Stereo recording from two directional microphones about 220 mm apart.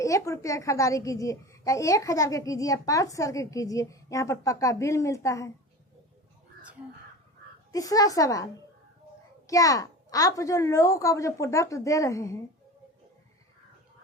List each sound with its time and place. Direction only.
0.0 s a child's voice: 15° left (ahead or behind)
7.7 s a child's voice: 15° left (ahead or behind)
9.5 s a child's voice: 15° left (ahead or behind)